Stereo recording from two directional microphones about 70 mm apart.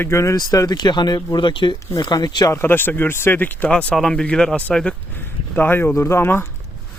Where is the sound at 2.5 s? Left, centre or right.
Left; by 5.0 s centre.